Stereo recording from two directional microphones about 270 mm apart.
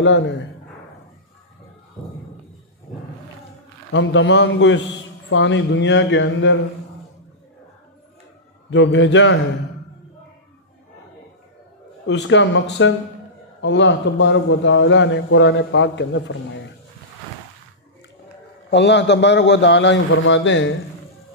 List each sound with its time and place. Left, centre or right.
3.9 s a man's voice: left
8.6 s a man's voice: left
12.1 s a man's voice: left
18.7 s a man's voice: left